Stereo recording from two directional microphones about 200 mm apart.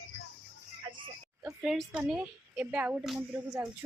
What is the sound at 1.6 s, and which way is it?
A woman's voice, 5° right (ahead or behind).